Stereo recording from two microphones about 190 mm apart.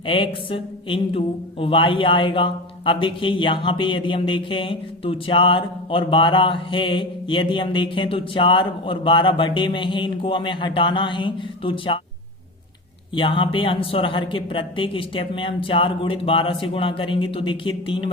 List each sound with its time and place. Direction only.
0.0 s speech: 25° left (ahead or behind)
13.1 s speech: 25° left (ahead or behind)